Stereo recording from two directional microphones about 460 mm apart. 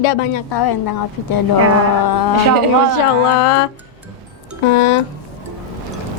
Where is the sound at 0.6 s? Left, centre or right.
Left.